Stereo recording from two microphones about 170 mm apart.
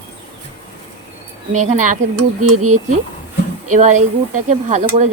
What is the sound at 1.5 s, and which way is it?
Speech, 45° right (ahead or behind).